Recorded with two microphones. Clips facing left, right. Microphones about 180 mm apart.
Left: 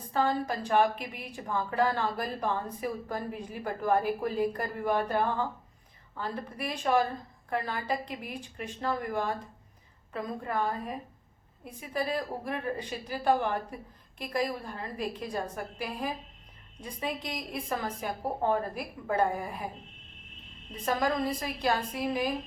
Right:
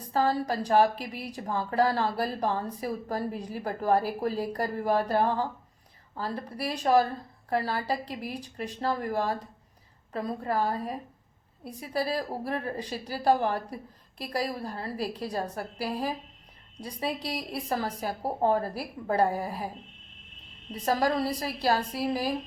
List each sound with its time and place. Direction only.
0.1 s a woman's voice: 35° right (ahead or behind)
20.8 s a woman's voice: 35° right (ahead or behind)